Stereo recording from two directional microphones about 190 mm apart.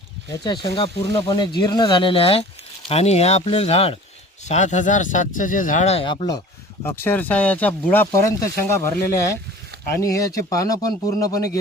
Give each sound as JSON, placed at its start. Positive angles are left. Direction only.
{"t": 0.4, "sound": "speech", "side_deg": 20}
{"t": 6.8, "sound": "speech", "side_deg": 10}